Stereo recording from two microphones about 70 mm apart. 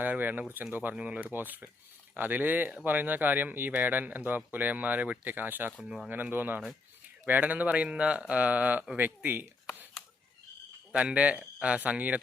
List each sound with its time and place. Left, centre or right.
0.0 s speech: right
10.9 s speech: centre